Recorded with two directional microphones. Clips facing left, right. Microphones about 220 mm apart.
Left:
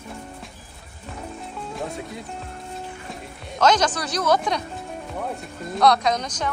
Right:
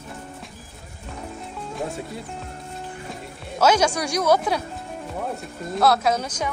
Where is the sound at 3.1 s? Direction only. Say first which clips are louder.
Right 1 dB; 10° right (ahead or behind).